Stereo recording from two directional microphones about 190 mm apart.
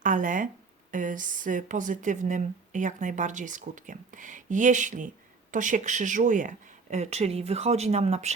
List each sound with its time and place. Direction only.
0.0 s speech: 45° right (ahead or behind)